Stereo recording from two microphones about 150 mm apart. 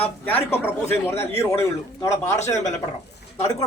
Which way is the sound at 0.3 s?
15° left (ahead or behind).